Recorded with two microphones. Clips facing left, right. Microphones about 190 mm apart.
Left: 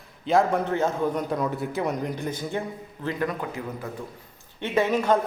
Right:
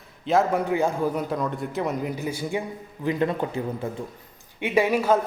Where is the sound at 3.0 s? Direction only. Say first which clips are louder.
Right 4 dB; 25° right (ahead or behind).